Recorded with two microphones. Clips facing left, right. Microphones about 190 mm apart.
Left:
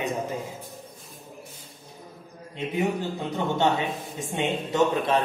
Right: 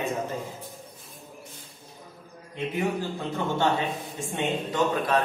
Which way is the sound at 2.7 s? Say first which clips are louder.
Left 2 dB; 20° left (ahead or behind).